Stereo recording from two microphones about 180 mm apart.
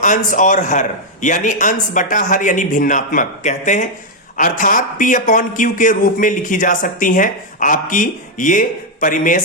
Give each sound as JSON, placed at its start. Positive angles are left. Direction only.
{"t": 0.0, "sound": "speech", "side_deg": 45}